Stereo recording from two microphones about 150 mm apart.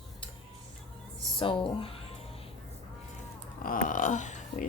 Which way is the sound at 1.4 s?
35° left (ahead or behind).